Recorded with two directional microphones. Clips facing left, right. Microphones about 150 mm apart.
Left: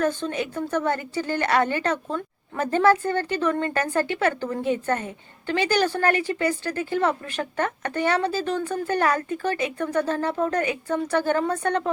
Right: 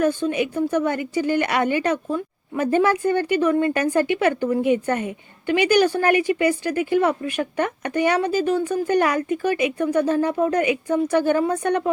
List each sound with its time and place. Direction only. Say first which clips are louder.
0.0 s a woman's voice: right 4 dB; 10° right (ahead or behind)